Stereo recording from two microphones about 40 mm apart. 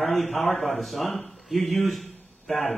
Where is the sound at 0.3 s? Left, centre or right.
Centre.